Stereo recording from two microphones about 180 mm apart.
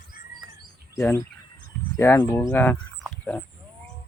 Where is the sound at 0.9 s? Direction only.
10° left (ahead or behind).